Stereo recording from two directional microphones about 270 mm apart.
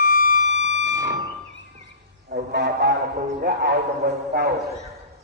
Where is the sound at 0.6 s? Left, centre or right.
Right.